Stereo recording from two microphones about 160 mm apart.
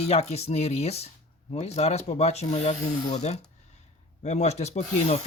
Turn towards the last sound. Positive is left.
turn(degrees=40)  # may be behind; listen again after turning